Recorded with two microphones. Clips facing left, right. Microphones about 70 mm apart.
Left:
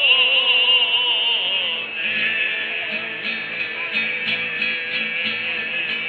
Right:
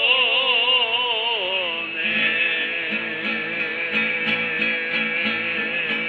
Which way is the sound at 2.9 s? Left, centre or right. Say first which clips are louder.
Right 1 dB; centre.